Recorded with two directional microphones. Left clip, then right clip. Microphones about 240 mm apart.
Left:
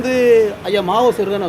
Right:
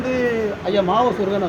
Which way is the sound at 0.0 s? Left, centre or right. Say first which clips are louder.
Left 8 dB; left.